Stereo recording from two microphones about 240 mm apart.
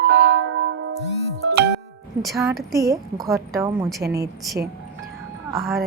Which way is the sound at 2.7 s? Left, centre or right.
Centre.